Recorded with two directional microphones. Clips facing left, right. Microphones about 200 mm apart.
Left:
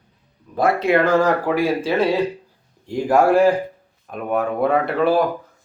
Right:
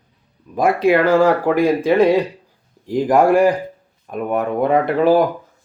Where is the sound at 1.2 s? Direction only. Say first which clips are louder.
Right 4 dB; 15° right (ahead or behind).